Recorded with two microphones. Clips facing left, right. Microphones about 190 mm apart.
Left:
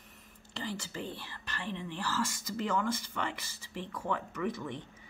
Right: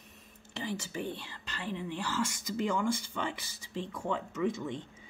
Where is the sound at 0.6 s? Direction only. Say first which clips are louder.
Right 2 dB; 20° right (ahead or behind).